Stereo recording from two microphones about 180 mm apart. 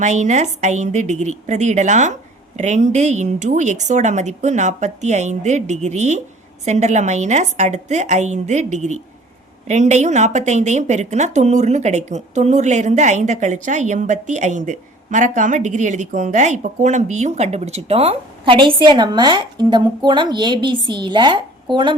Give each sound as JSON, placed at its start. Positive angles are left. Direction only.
{"t": 0.0, "sound": "speech", "side_deg": -40}